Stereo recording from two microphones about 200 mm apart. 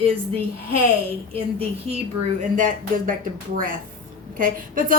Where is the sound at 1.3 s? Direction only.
30° right (ahead or behind).